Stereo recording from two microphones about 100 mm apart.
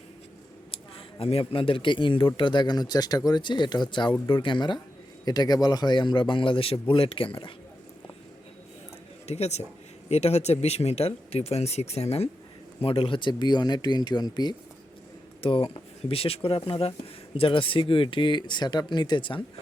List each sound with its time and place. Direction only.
0.7 s a man's voice: 70° left (ahead or behind)
9.2 s speech: 90° left
12.8 s speech: 65° left (ahead or behind); by 14.5 s 45° left (ahead or behind)
15.4 s a man's voice: 60° left (ahead or behind)